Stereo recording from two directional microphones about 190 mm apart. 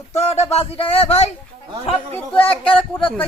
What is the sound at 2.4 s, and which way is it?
Speech, 30° left (ahead or behind).